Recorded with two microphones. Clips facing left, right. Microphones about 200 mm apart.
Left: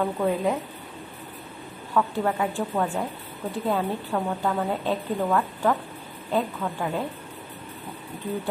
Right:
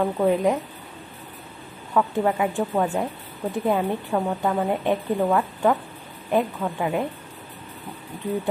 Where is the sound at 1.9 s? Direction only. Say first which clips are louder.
Right 3 dB; 15° right (ahead or behind).